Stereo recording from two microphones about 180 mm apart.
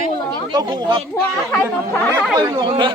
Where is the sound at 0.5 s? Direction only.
25° right (ahead or behind).